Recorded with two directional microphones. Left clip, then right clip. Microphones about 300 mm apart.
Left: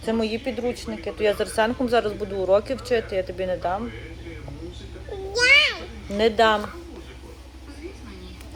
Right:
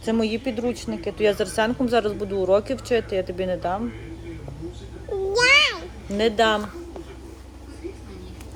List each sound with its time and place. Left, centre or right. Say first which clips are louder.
0.0 s speech: right 1 dB; centre
5.3 s a sound: even; centre
6.1 s a woman's voice: left 1 dB; centre